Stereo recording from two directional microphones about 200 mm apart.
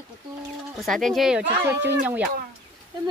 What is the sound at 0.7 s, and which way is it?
Speech, centre (ahead or behind).